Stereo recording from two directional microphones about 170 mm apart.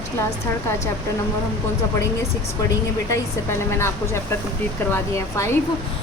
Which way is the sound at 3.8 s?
15° left (ahead or behind).